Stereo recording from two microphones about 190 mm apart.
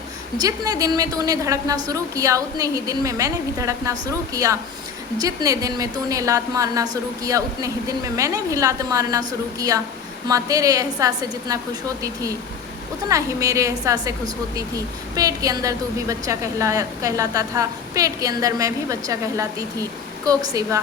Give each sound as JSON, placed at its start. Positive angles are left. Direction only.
{"t": 0.3, "sound": "a woman's voice", "side_deg": -20}